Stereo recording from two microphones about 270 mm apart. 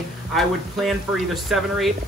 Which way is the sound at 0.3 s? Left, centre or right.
Centre.